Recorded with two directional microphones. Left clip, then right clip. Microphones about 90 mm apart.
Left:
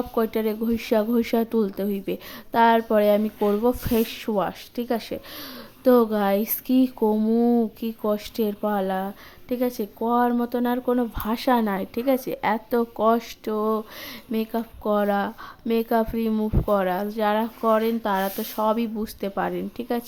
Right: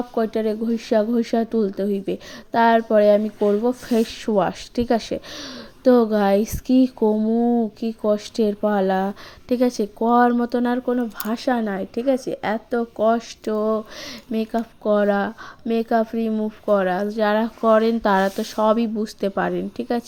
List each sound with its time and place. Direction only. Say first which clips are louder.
0.1 s speech: right 3 dB; 5° right (ahead or behind)
3.2 s speech: right 3 dB; 5° right (ahead or behind)
3.9 s speech: right 3 dB; 20° right (ahead or behind)
4.4 s speech: right 6 dB; 40° right (ahead or behind)
5.8 s speech: right 2 dB; 15° right (ahead or behind)
7.1 s speech: right 1 dB; 5° left (ahead or behind)
7.8 s speech: right 4 dB; 20° right (ahead or behind); by 9.0 s 35° right (ahead or behind)
9.0 s speech: right 6 dB; 55° right (ahead or behind)
10.2 s speech: right 4 dB; 35° right (ahead or behind)
10.8 s speech: even; 5° right (ahead or behind)
13.4 s speech: right 3 dB; 25° right (ahead or behind)
18.0 s speech: right 6 dB; 50° right (ahead or behind)
18.3 s speech: right 4 dB; 30° right (ahead or behind)